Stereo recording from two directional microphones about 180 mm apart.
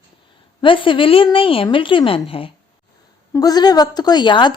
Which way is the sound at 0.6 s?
30° left (ahead or behind).